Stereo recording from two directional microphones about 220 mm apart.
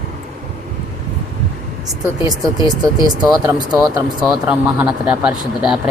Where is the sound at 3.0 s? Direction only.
20° right (ahead or behind).